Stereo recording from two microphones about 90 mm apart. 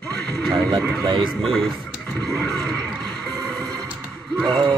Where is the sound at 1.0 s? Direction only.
65° right (ahead or behind).